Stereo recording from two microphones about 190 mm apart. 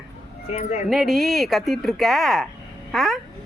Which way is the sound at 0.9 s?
Centre (ahead or behind).